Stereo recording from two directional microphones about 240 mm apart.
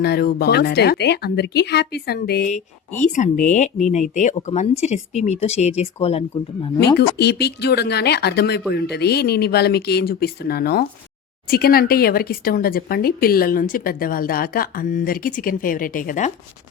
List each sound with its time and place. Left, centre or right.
0.0 s speech: left
6.7 s speech: left